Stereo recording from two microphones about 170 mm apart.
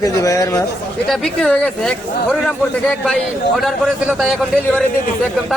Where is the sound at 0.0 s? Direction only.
20° left (ahead or behind).